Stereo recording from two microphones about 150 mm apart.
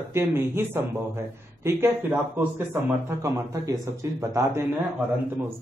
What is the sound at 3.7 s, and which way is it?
Speech, 20° right (ahead or behind).